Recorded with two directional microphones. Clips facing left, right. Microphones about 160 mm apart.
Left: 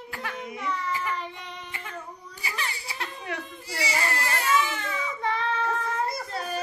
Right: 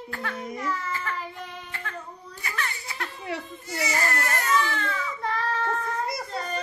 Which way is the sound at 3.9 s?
30° left (ahead or behind).